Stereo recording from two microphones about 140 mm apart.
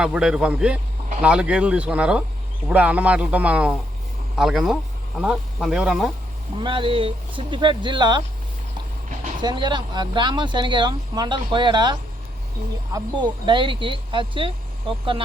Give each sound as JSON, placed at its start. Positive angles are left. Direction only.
{"t": 0.0, "sound": "speech", "side_deg": -5}
{"t": 6.6, "sound": "speech", "side_deg": -35}
{"t": 9.4, "sound": "speech", "side_deg": -30}